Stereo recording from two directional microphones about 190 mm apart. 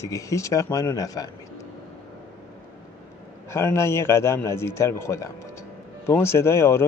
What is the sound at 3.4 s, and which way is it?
Speech, 15° left (ahead or behind).